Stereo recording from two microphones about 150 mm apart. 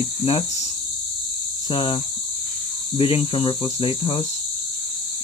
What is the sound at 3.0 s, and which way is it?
Speech, 40° left (ahead or behind).